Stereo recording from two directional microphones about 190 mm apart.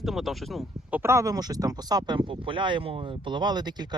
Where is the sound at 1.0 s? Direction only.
15° right (ahead or behind).